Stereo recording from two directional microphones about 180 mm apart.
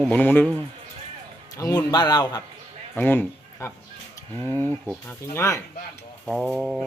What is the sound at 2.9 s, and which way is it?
Speech, 10° left (ahead or behind).